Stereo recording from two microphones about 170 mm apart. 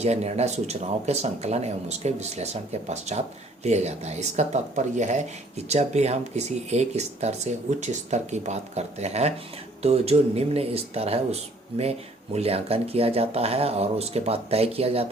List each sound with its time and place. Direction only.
0.0 s speech: 40° right (ahead or behind)